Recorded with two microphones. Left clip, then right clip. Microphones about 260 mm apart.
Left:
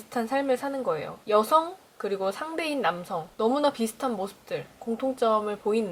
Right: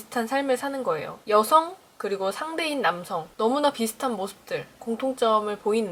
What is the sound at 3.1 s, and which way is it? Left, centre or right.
Speech, centre.